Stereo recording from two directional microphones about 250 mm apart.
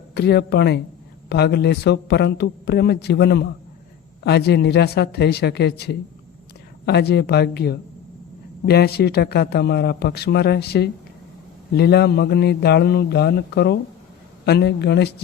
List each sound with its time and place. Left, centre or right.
0.1 s speech: left